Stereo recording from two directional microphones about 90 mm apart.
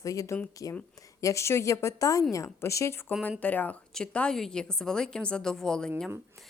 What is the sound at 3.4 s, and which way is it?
A woman's voice, 20° left (ahead or behind).